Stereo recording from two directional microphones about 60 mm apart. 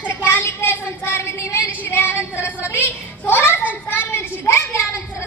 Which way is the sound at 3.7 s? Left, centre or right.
Left.